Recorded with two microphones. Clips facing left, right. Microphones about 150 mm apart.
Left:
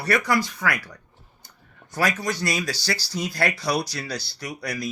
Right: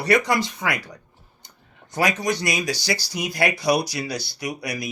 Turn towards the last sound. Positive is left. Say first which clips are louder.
# right 2 dB
turn(degrees=-10)  # may be behind; listen again after turning